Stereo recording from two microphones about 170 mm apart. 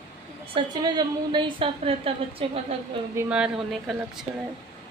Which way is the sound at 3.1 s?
5° right (ahead or behind).